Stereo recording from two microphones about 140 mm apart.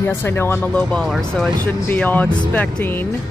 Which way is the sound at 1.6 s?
10° left (ahead or behind).